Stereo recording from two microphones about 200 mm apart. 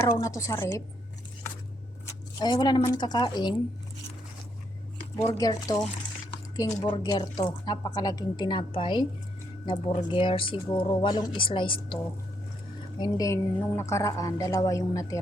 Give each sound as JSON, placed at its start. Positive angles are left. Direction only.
{"t": 0.0, "sound": "a woman's voice", "side_deg": 15}
{"t": 2.4, "sound": "speech", "side_deg": 20}
{"t": 5.3, "sound": "a woman's voice", "side_deg": 20}
{"t": 13.0, "sound": "a woman's voice", "side_deg": 15}